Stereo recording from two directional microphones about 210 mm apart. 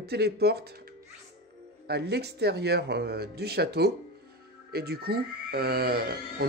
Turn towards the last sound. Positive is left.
turn(degrees=-45)  # may be behind; listen again after turning